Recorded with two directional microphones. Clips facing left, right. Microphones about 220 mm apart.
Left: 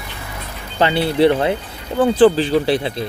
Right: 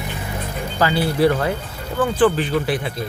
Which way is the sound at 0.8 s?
25° left (ahead or behind).